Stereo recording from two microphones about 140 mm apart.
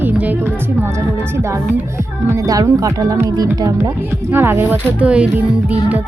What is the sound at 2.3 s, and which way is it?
Speech, 25° right (ahead or behind).